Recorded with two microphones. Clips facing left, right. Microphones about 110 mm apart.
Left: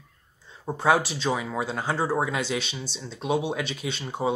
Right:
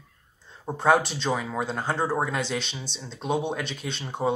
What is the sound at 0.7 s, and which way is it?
Speech, 5° left (ahead or behind).